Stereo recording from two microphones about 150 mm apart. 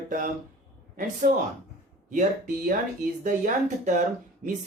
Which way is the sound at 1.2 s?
65° right (ahead or behind).